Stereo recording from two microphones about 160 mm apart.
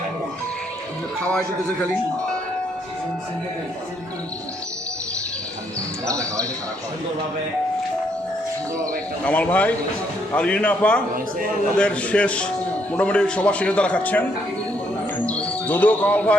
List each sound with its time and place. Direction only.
1.2 s speech: 5° left (ahead or behind)
6.1 s speech: 20° right (ahead or behind)
9.2 s speech: 10° left (ahead or behind)
15.3 s speech: 10° left (ahead or behind)